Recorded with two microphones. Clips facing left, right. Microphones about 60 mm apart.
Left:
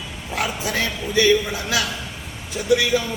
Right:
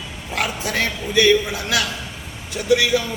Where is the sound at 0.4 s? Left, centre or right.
Centre.